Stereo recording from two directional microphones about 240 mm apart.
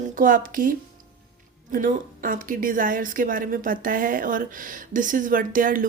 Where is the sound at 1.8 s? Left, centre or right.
Right.